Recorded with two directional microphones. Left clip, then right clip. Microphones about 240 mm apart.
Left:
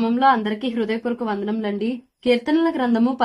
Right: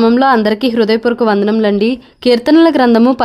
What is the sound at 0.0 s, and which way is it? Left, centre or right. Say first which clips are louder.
Speech: right 8 dB; right.